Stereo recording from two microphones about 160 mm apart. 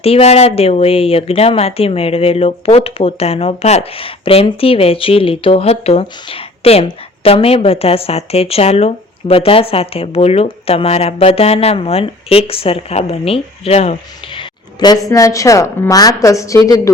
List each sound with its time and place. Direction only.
0.0 s speech: 40° left (ahead or behind)
14.8 s a woman's voice: 25° left (ahead or behind)